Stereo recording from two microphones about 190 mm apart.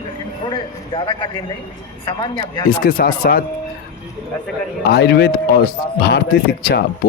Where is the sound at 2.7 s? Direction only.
50° left (ahead or behind).